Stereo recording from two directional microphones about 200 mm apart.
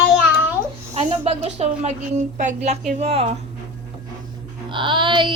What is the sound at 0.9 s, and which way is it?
Speech, 30° right (ahead or behind).